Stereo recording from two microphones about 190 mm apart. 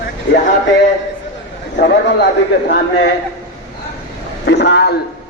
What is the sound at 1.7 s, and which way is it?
Speech, 60° left (ahead or behind).